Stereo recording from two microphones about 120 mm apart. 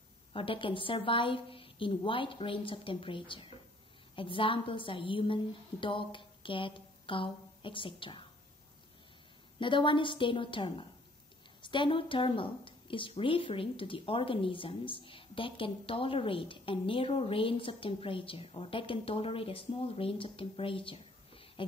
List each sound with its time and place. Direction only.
0.3 s a woman's voice: 45° left (ahead or behind)
9.6 s a woman's voice: 45° left (ahead or behind)